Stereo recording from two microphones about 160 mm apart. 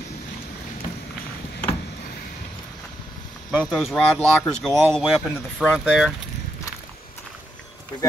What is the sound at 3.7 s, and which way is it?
Speech, 5° left (ahead or behind).